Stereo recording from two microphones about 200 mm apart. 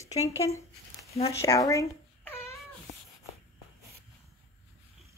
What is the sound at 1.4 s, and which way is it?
Babbling, 15° left (ahead or behind).